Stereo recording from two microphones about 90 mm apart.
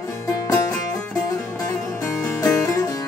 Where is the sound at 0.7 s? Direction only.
10° left (ahead or behind).